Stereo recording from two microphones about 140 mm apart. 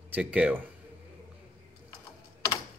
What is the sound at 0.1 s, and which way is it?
Speech, 10° right (ahead or behind).